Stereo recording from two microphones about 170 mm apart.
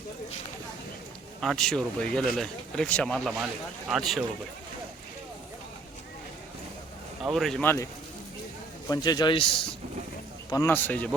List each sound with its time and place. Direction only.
1.4 s speech: centre (ahead or behind)
7.2 s speech: centre (ahead or behind)
7.6 s a man's voice: 15° left (ahead or behind)
8.9 s a man's voice: 25° left (ahead or behind)
10.5 s a man's voice: 15° left (ahead or behind)